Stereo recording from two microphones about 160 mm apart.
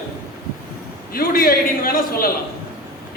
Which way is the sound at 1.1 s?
65° left (ahead or behind).